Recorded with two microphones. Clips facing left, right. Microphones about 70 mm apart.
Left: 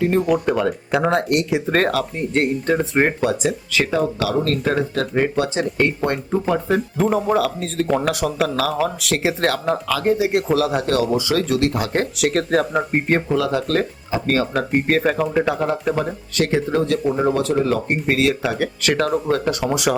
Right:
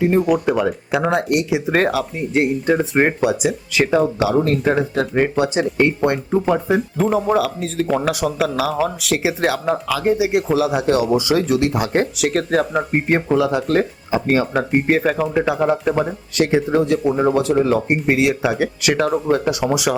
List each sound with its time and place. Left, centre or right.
0.2 s speech: centre
3.9 s speech: right
6.9 s speech: centre
12.2 s speech: centre
13.2 s speech: centre